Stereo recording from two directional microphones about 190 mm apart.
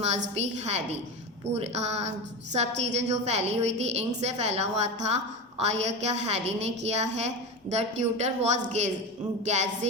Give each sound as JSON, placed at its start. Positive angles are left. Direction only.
{"t": 0.0, "sound": "a woman's voice", "side_deg": -35}